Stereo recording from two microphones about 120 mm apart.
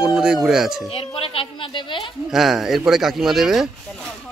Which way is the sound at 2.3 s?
Centre (ahead or behind).